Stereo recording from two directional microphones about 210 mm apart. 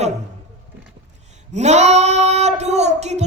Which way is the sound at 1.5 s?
30° right (ahead or behind).